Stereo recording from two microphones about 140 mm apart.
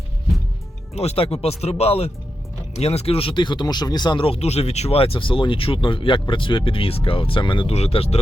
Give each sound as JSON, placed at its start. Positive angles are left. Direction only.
{"t": 0.9, "sound": "speech", "side_deg": 45}